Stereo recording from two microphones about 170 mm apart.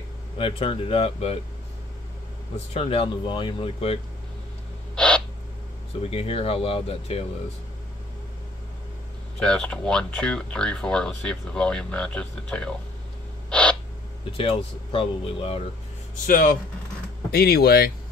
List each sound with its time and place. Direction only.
0.4 s speech: 30° left (ahead or behind)
2.7 s speech: 35° left (ahead or behind)
4.9 s owl: 5° left (ahead or behind)
6.0 s speech: 35° left (ahead or behind)
9.4 s speech: 5° left (ahead or behind)
13.5 s owl: 5° left (ahead or behind)
14.3 s speech: 35° left (ahead or behind)
16.3 s speech: 55° left (ahead or behind)
17.3 s speech: 65° left (ahead or behind)